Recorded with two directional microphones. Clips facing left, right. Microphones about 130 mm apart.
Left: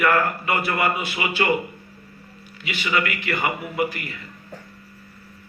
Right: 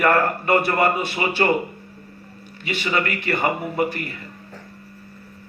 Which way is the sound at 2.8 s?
35° right (ahead or behind).